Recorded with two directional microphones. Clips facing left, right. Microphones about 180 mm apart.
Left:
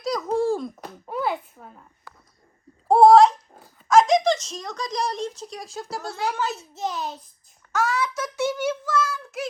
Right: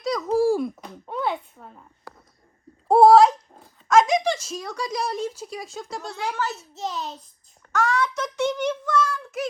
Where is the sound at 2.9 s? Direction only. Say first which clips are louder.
Even; 5° right (ahead or behind).